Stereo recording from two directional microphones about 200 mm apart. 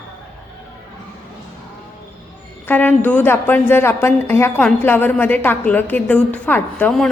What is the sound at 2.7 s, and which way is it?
A woman's voice, 10° left (ahead or behind).